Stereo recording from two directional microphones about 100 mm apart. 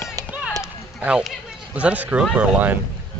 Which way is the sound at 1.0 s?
10° right (ahead or behind).